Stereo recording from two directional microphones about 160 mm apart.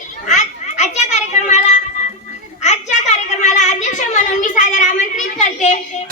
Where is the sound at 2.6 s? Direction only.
45° left (ahead or behind).